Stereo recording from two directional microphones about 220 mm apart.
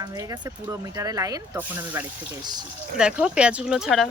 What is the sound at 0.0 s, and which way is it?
Speech, 15° right (ahead or behind).